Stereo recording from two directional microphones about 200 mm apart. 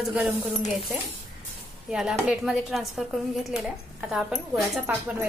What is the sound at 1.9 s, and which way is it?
Speech, centre (ahead or behind).